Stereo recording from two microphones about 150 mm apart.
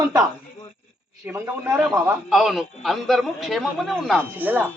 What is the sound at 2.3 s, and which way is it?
A man's voice, centre (ahead or behind).